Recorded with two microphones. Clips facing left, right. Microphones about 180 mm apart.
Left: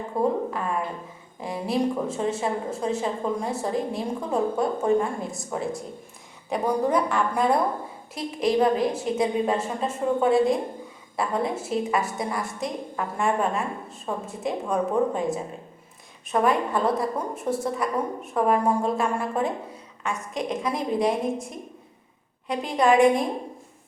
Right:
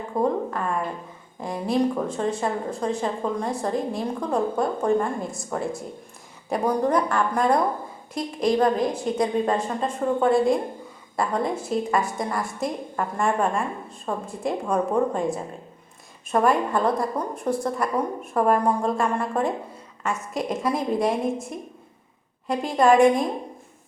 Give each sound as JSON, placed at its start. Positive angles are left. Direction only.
{"t": 0.1, "sound": "a woman's voice", "side_deg": 5}
{"t": 1.4, "sound": "a woman's voice", "side_deg": 5}